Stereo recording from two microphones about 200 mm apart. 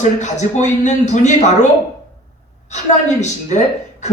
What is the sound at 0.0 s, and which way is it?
Speech, 35° left (ahead or behind).